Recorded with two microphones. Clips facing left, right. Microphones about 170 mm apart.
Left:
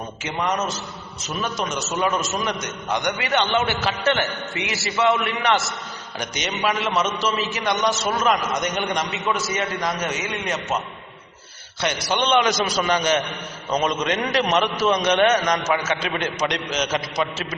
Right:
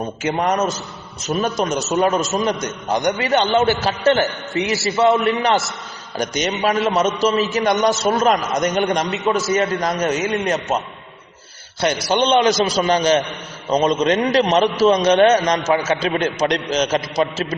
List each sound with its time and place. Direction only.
0.2 s a man's voice: 45° right (ahead or behind)
11.8 s a man's voice: 35° right (ahead or behind)